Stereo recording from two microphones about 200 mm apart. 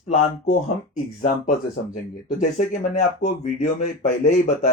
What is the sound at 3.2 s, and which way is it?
Speech, 35° left (ahead or behind).